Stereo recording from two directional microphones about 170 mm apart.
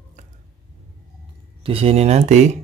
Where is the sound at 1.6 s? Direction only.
35° right (ahead or behind).